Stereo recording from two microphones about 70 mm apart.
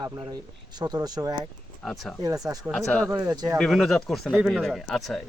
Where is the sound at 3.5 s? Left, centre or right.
Centre.